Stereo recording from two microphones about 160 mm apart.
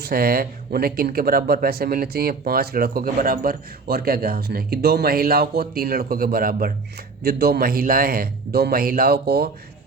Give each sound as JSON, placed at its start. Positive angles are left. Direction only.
{"t": 0.0, "sound": "speech", "side_deg": -70}
{"t": 7.2, "sound": "speech", "side_deg": -75}